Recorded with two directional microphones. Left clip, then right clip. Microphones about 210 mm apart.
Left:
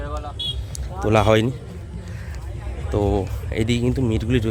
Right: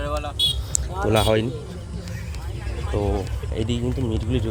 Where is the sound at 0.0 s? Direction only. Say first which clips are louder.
Right 5 dB; 50° right (ahead or behind).